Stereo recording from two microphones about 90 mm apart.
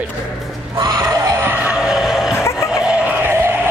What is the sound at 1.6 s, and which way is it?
Vehicle, 5° right (ahead or behind).